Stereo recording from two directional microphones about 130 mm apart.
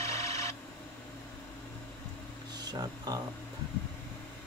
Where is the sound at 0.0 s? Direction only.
25° left (ahead or behind).